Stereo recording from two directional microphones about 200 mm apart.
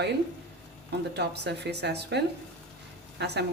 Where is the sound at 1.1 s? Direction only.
55° right (ahead or behind).